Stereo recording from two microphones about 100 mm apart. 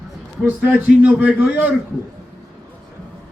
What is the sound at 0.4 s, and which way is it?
A man's voice, 20° right (ahead or behind).